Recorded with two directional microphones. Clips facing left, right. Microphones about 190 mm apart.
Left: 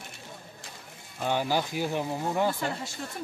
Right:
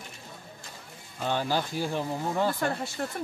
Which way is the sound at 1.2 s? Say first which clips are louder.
Left 1 dB; 15° left (ahead or behind).